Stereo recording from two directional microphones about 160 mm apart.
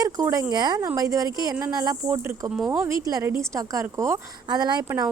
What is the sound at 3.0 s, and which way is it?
Speech, 20° right (ahead or behind).